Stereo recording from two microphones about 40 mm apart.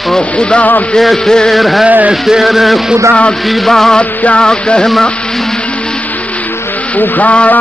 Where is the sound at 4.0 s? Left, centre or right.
Left.